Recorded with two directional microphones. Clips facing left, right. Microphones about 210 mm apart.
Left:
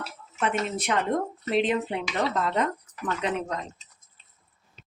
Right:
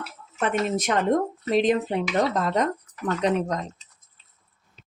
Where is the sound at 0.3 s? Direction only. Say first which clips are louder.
Right 3 dB; 40° right (ahead or behind).